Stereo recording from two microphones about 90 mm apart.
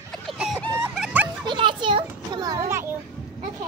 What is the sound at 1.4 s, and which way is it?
Children playing, 60° right (ahead or behind).